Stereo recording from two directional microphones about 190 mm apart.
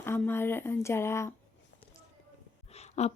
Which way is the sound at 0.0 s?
15° left (ahead or behind).